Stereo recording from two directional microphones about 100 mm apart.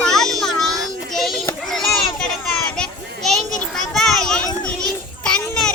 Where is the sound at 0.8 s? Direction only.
5° left (ahead or behind).